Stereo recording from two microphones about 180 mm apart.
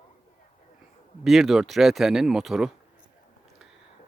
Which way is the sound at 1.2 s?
Centre (ahead or behind).